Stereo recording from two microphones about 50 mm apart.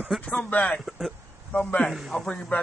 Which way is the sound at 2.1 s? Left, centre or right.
Centre.